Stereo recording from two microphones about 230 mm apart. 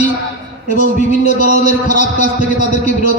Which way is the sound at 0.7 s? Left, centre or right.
Right.